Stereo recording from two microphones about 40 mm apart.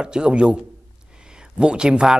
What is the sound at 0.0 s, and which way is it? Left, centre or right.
Speech, right.